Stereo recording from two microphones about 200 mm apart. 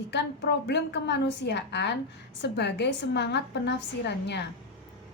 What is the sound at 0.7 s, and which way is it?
A woman's voice, 60° left (ahead or behind).